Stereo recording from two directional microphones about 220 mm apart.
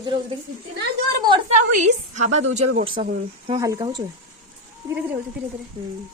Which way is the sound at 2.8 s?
25° right (ahead or behind).